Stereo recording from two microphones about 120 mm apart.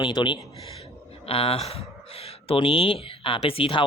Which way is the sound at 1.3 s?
55° left (ahead or behind).